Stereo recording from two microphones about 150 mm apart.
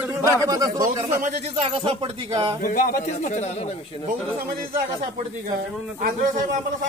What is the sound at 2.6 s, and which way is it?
Speech, 65° left (ahead or behind).